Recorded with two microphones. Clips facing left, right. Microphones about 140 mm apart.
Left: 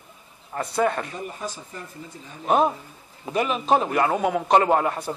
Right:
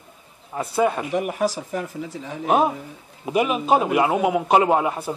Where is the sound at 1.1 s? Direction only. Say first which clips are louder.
Right 11 dB; 90° right.